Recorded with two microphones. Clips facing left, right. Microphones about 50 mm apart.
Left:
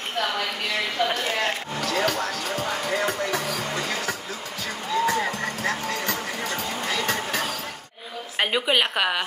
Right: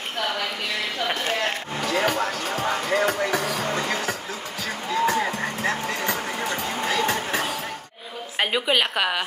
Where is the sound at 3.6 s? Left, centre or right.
Right.